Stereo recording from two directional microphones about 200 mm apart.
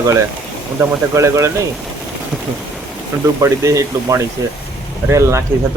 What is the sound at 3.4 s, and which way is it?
Speech, 15° right (ahead or behind).